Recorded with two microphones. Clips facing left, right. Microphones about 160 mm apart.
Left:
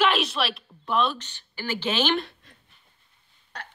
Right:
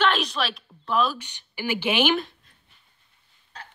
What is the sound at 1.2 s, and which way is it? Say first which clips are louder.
Speech: right 3 dB; 15° right (ahead or behind).